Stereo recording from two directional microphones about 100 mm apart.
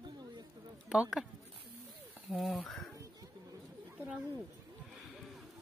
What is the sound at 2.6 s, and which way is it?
Bird, centre (ahead or behind).